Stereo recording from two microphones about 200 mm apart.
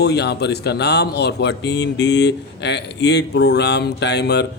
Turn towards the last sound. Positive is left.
turn(degrees=55)  # may be behind; listen again after turning